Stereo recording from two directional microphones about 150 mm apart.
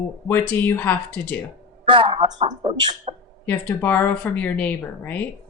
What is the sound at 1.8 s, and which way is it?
A man's voice, 35° right (ahead or behind).